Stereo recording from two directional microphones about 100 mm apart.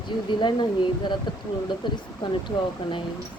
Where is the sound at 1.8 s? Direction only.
50° left (ahead or behind).